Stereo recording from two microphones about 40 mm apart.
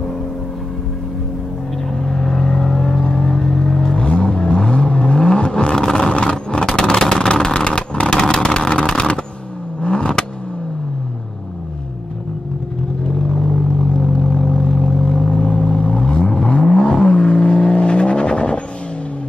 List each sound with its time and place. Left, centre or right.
2.1 s vehicle: centre
13.3 s vehicle: centre